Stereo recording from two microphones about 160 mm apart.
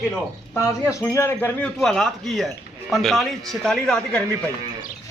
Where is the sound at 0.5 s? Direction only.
15° left (ahead or behind).